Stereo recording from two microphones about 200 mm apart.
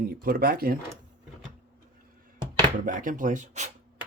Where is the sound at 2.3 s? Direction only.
20° right (ahead or behind).